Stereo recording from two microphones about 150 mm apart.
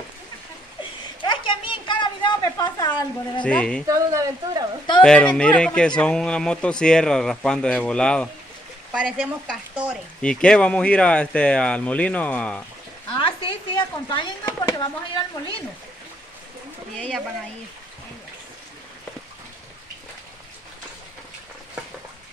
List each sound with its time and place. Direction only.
1.2 s a sound: 35° left (ahead or behind)
3.4 s speech: 5° left (ahead or behind)
3.8 s a woman's voice: 20° right (ahead or behind)
5.0 s speech: 5° left (ahead or behind)
8.9 s speech: 10° right (ahead or behind)
10.2 s speech: 5° left (ahead or behind)
13.1 s a sound: 35° left (ahead or behind)
16.9 s speech: 5° left (ahead or behind)